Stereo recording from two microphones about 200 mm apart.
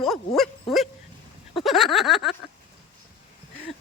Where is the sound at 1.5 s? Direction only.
Centre (ahead or behind).